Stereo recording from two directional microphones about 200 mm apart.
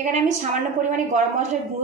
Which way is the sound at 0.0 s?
35° right (ahead or behind).